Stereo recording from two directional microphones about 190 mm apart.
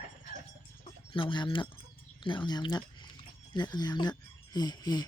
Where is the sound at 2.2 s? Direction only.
25° left (ahead or behind).